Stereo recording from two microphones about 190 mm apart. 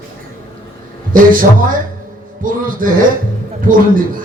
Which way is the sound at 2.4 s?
45° right (ahead or behind).